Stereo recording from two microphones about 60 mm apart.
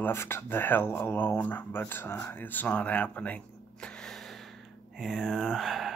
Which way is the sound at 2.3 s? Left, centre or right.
Left.